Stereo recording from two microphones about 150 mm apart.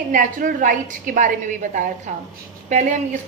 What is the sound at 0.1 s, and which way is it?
A woman's voice, 60° right (ahead or behind).